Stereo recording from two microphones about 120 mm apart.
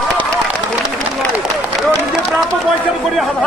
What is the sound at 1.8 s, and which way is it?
Run, centre (ahead or behind).